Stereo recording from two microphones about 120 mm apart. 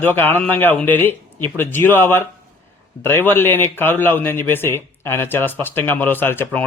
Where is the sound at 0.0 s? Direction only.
15° left (ahead or behind).